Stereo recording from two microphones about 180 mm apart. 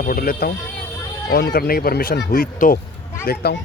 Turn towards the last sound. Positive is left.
turn(degrees=65)  # may be behind; listen again after turning